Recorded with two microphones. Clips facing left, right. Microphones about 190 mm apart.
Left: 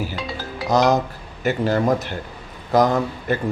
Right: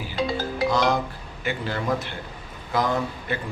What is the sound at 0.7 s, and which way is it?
A man's voice, 40° left (ahead or behind).